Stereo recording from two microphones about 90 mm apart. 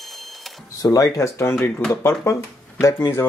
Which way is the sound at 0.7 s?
40° left (ahead or behind).